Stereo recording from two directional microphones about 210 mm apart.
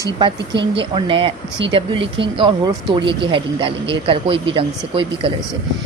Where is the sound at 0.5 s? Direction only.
55° right (ahead or behind).